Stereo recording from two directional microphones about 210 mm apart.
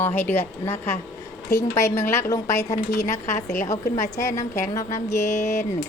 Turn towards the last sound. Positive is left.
turn(degrees=35)  # may be behind; listen again after turning